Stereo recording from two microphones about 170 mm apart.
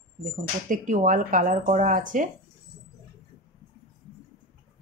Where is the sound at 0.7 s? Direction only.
50° right (ahead or behind).